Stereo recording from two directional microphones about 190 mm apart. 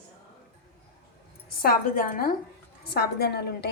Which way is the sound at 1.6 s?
50° left (ahead or behind).